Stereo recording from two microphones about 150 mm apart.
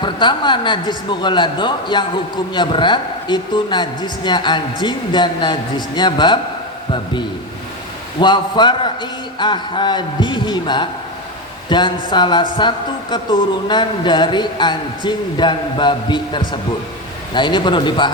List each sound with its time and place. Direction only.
0.0 s a man's voice: 30° left (ahead or behind)